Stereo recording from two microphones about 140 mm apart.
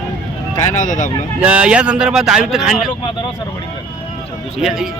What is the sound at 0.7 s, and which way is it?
Speech, 65° left (ahead or behind).